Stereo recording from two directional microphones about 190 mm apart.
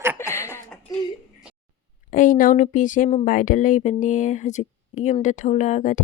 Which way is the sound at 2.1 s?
45° left (ahead or behind).